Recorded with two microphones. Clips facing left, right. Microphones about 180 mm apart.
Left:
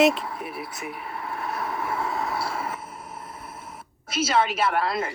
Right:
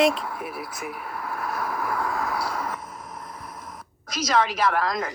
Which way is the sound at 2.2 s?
Centre (ahead or behind).